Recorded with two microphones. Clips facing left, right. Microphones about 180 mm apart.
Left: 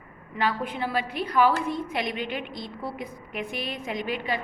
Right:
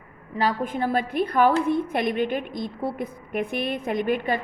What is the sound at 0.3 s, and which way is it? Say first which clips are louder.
A woman's voice: right 3 dB; 45° right (ahead or behind).